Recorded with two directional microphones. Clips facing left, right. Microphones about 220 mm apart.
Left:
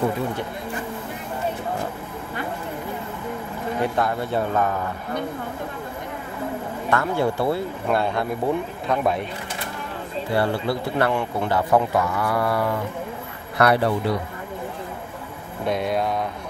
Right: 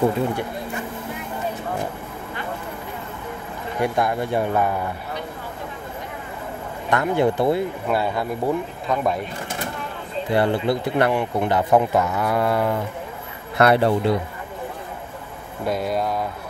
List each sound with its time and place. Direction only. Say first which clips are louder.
3.8 s speech: right 3 dB; 15° right (ahead or behind)
6.9 s speech: right 3 dB; 20° right (ahead or behind)
7.9 s speech: left 2 dB; 5° right (ahead or behind)
10.3 s speech: right 3 dB; 20° right (ahead or behind)
15.6 s speech: even; centre (ahead or behind)